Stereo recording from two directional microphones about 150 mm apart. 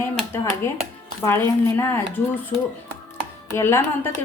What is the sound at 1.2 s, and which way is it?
Speech, 15° left (ahead or behind).